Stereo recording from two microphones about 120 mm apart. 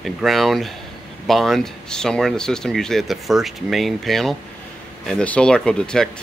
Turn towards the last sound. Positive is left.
turn(degrees=5)  # may be behind; listen again after turning